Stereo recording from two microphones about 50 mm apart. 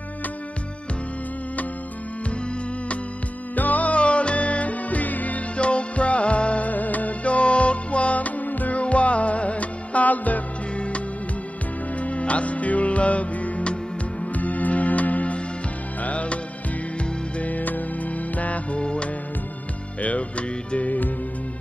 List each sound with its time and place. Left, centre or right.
3.5 s music: left
12.0 s music: left